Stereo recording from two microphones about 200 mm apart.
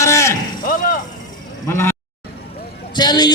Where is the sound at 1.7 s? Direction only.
10° left (ahead or behind).